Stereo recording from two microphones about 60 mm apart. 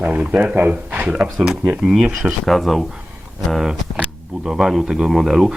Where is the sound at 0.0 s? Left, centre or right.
Right.